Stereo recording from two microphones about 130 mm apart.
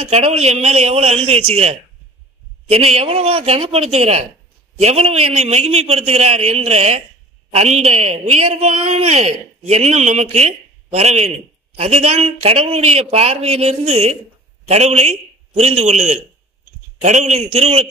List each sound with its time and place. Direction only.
0.0 s a man's voice: 50° right (ahead or behind)